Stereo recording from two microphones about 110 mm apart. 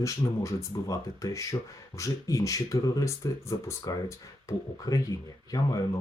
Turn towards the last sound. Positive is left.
turn(degrees=35)  # may be behind; listen again after turning